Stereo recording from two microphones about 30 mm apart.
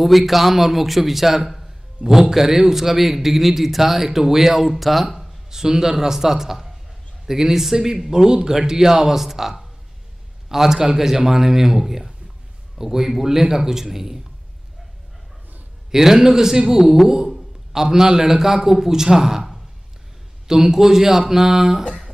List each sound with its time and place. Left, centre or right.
0.2 s speech: centre
5.5 s speech: centre
15.9 s speech: centre
20.4 s speech: centre
21.8 s guitar: left